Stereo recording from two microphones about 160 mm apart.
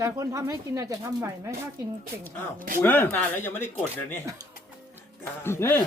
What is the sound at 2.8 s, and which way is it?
Speech, 10° left (ahead or behind).